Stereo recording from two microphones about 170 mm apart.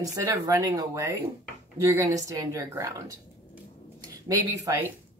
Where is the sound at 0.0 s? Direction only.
20° right (ahead or behind).